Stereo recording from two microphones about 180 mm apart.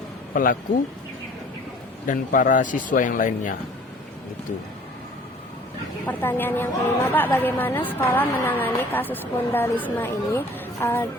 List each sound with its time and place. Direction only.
2.0 s speech: 45° left (ahead or behind)
6.1 s a woman's voice: 10° left (ahead or behind)